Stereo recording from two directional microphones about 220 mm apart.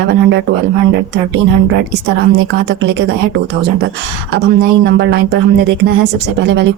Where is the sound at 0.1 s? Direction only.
55° right (ahead or behind).